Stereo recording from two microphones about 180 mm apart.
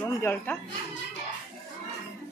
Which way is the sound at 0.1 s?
15° left (ahead or behind).